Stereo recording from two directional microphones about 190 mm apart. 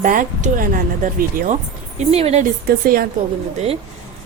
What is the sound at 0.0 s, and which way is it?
A woman's voice, 45° right (ahead or behind).